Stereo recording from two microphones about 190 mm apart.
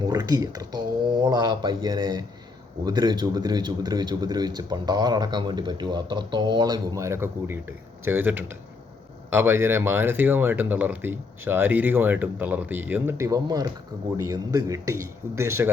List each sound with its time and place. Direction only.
0.1 s a man's voice: 20° right (ahead or behind)